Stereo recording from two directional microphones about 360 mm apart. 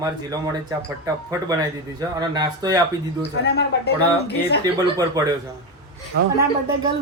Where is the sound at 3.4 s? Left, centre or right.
Left.